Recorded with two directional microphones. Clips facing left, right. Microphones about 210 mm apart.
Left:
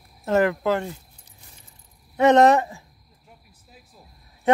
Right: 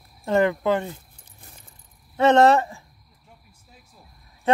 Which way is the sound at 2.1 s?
15° left (ahead or behind).